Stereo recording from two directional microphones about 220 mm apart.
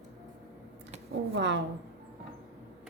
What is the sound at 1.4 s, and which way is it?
Speech, 55° right (ahead or behind).